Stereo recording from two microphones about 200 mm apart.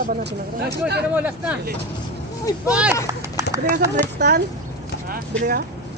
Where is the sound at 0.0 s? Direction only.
50° right (ahead or behind).